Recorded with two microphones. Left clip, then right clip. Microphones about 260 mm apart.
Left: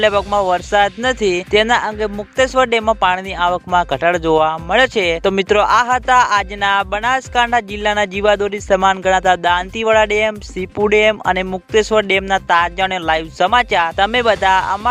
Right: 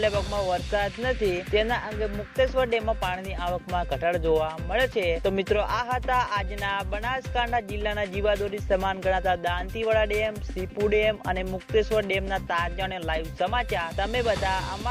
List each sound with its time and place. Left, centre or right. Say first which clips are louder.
0.0 s speech: left 12 dB; left